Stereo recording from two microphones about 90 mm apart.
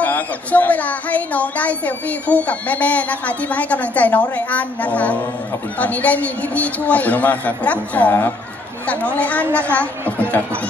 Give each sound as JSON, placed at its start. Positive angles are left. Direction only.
{"t": 0.0, "sound": "a woman's voice", "side_deg": 20}